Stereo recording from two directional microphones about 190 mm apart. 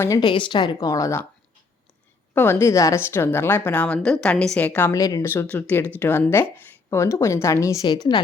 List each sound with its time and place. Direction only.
0.0 s speech: 20° left (ahead or behind)
2.3 s a woman's voice: 10° left (ahead or behind)